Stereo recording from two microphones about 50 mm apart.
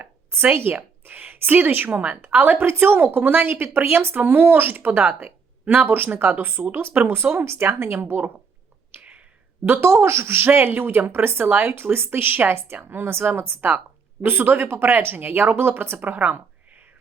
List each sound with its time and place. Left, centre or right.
0.5 s a woman's voice: right
4.9 s a woman's voice: right
8.9 s a sound: right
9.8 s speech: right
10.8 s a woman's voice: right
16.0 s a sound: right